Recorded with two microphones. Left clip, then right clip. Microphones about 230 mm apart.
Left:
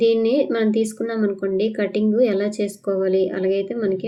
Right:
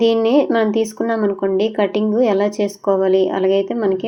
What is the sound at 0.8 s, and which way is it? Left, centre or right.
Speech, right.